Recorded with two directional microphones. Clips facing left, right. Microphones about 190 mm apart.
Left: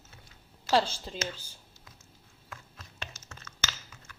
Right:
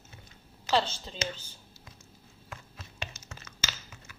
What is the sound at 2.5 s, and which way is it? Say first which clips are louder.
Chopping: right 2 dB; 5° right (ahead or behind).